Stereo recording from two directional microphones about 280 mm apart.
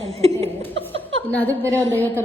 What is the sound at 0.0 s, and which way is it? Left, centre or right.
Chuckle, right.